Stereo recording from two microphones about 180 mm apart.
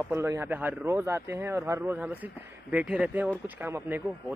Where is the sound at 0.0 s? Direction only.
15° right (ahead or behind).